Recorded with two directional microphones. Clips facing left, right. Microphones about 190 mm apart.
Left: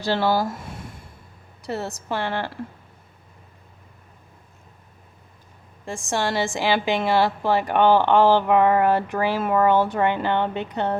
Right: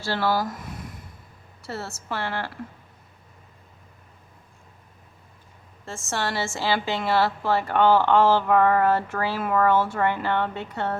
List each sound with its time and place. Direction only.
0.0 s a woman's voice: 20° left (ahead or behind)
5.8 s a woman's voice: 15° left (ahead or behind)